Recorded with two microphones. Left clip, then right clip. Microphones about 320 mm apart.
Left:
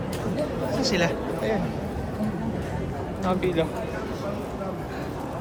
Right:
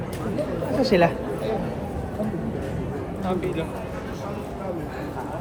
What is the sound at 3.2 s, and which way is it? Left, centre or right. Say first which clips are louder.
Speech: left 3 dB; left.